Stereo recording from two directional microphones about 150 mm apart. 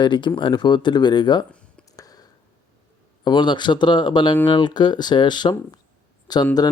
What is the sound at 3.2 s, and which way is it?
Speech, 30° left (ahead or behind).